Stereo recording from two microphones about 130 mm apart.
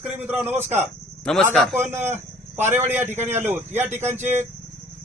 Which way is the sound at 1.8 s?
15° right (ahead or behind).